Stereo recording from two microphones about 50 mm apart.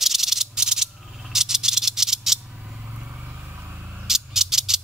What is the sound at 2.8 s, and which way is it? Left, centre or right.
Vehicle, right.